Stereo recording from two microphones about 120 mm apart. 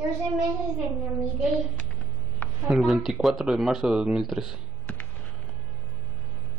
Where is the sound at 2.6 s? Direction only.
Centre (ahead or behind).